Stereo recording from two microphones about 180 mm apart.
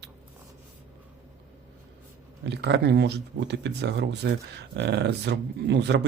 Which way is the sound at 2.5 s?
75° right (ahead or behind).